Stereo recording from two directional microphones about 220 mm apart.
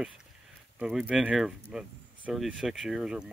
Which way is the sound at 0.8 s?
5° right (ahead or behind).